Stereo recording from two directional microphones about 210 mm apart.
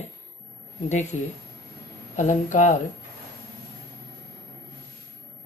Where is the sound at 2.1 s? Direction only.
35° left (ahead or behind).